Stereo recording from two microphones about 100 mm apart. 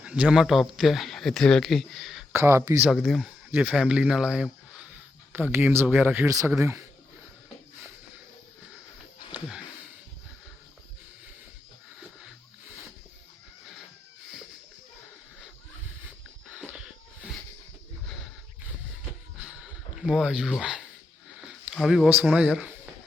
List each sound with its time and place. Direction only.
0.0 s speech: 10° right (ahead or behind)
2.3 s speech: 30° right (ahead or behind)
2.9 s speech: centre (ahead or behind)
3.5 s speech: 15° right (ahead or behind)
5.3 s speech: 20° right (ahead or behind)
6.2 s speech: 35° right (ahead or behind)
16.0 s a sound: 10° right (ahead or behind)
20.0 s speech: 5° right (ahead or behind)
21.8 s speech: 5° right (ahead or behind)